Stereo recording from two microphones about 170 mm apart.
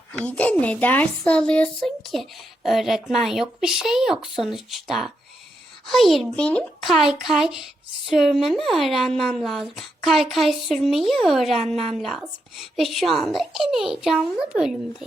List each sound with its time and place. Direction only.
0.1 s a child's voice: 10° left (ahead or behind)